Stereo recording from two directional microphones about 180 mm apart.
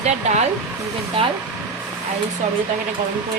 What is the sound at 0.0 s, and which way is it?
Speech, 40° right (ahead or behind).